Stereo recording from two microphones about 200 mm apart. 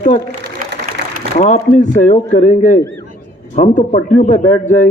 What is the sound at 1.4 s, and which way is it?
A man's voice, 40° left (ahead or behind).